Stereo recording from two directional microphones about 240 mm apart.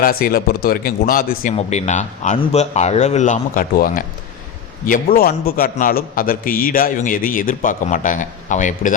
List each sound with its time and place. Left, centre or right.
0.0 s a man's voice: left